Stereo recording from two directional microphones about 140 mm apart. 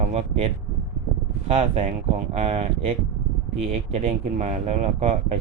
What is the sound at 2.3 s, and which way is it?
Speech, 45° right (ahead or behind).